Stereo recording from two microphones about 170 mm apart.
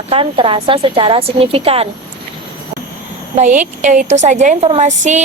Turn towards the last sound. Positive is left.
turn(degrees=-45)  # may be behind; listen again after turning